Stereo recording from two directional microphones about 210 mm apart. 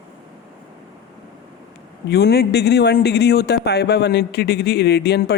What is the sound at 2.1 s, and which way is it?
Speech, 50° left (ahead or behind).